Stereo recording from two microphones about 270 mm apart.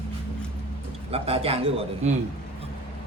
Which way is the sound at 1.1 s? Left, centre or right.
Right.